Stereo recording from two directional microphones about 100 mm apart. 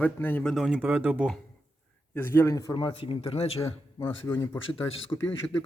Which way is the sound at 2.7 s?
60° left (ahead or behind).